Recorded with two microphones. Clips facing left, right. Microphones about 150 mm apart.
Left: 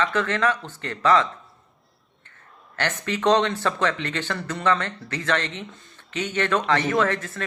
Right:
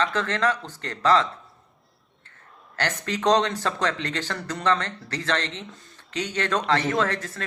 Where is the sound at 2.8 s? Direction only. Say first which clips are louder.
Left 1 dB; 40° right (ahead or behind).